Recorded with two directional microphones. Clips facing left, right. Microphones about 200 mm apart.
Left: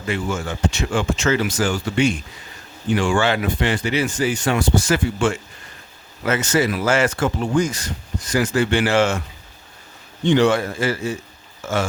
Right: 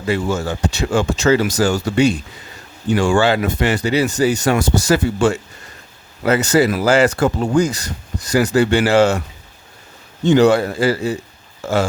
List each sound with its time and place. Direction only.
0.1 s speech: 35° right (ahead or behind)
10.2 s speech: 40° right (ahead or behind)